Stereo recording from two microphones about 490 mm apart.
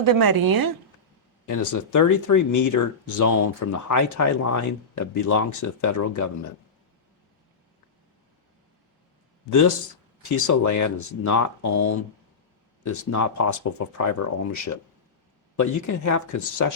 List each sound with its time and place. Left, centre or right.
0.0 s a woman's voice: right
1.5 s speech: left
9.5 s speech: left